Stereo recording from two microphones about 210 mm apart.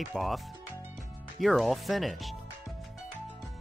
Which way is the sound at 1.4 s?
Centre (ahead or behind).